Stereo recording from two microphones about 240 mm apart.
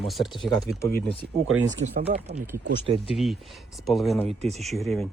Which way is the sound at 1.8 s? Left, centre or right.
Right.